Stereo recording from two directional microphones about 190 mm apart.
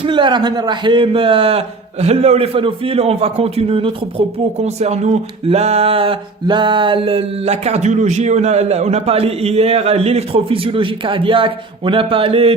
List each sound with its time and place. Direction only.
0.0 s a man's voice: 25° right (ahead or behind)